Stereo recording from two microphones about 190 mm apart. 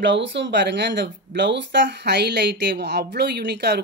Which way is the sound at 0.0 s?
70° right (ahead or behind).